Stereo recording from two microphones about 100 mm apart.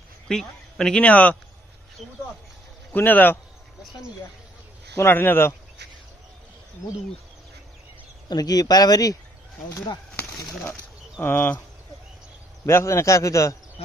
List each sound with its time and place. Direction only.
0.3 s speech: 5° left (ahead or behind)
2.9 s speech: 15° left (ahead or behind)
4.9 s speech: 20° left (ahead or behind)
8.3 s a man's voice: 40° left (ahead or behind)
10.7 s speech: 20° left (ahead or behind)
12.6 s a man's voice: 30° left (ahead or behind)